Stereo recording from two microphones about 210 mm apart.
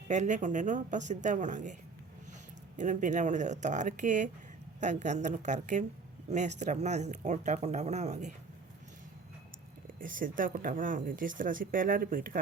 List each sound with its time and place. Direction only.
0.1 s speech: 35° right (ahead or behind)
2.7 s speech: 35° right (ahead or behind)
10.0 s speech: 40° right (ahead or behind)